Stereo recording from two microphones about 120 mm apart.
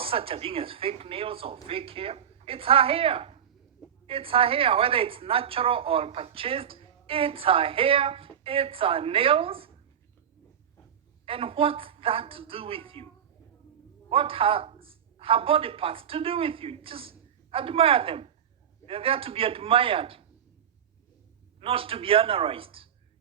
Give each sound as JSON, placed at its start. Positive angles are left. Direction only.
{"t": 0.0, "sound": "a woman's voice", "side_deg": -50}
{"t": 11.3, "sound": "a woman's voice", "side_deg": -50}
{"t": 14.1, "sound": "a woman's voice", "side_deg": -50}
{"t": 21.6, "sound": "a woman's voice", "side_deg": -50}